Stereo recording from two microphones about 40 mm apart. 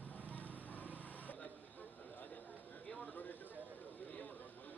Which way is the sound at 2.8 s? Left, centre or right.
Left.